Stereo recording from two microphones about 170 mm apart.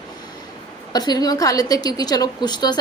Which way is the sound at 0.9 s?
25° left (ahead or behind).